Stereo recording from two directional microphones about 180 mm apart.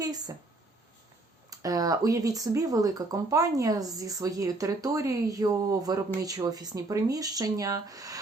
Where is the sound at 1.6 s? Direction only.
20° right (ahead or behind).